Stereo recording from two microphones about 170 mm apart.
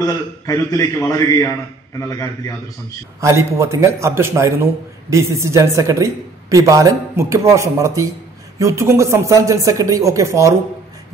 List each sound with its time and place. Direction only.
0.0 s a man's voice: 20° left (ahead or behind)
3.2 s a woman's voice: 15° right (ahead or behind)